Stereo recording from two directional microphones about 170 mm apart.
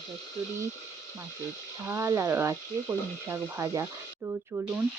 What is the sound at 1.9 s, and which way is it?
Speech, 15° right (ahead or behind).